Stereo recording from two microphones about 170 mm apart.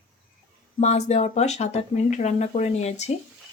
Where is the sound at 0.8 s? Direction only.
40° left (ahead or behind).